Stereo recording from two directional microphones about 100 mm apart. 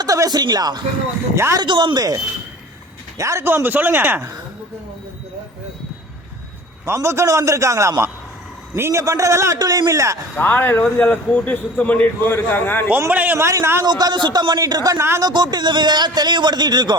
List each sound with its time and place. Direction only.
0.0 s a man's voice: 40° right (ahead or behind)
3.2 s speech: 30° right (ahead or behind)
6.8 s a man's voice: 30° right (ahead or behind)
10.3 s a man's voice: 20° left (ahead or behind)
13.1 s a man's voice: 15° right (ahead or behind)
13.8 s a man's voice: 45° right (ahead or behind)